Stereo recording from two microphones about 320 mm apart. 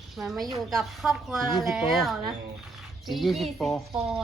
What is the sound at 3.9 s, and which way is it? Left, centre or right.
Speech, centre.